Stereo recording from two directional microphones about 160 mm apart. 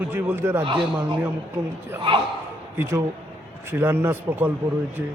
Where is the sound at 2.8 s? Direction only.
15° right (ahead or behind).